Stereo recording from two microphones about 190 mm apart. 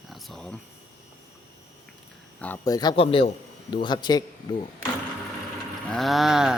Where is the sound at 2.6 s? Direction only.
20° left (ahead or behind).